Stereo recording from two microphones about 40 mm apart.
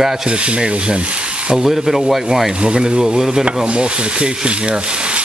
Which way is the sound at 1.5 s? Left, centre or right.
Centre.